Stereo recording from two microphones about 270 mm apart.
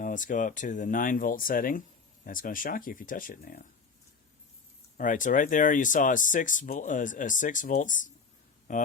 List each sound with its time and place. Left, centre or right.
0.0 s speech: left
4.9 s speech: left